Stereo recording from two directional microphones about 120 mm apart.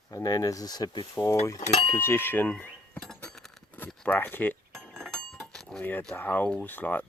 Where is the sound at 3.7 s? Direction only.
15° left (ahead or behind).